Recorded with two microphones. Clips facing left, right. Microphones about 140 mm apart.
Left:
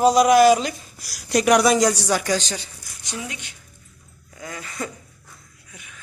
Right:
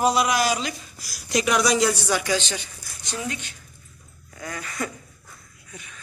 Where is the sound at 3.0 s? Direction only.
15° left (ahead or behind).